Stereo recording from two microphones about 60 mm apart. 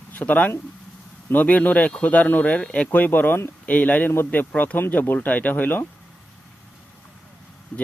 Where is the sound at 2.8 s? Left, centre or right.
Left.